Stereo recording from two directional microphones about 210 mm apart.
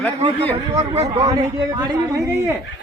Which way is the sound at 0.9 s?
25° right (ahead or behind).